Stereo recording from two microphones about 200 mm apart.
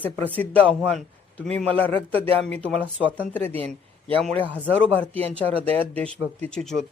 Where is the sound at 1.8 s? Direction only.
25° right (ahead or behind).